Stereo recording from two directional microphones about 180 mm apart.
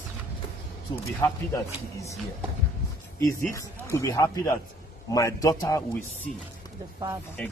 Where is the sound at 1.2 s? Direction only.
15° left (ahead or behind).